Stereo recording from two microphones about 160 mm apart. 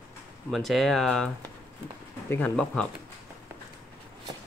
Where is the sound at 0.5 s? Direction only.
Centre (ahead or behind).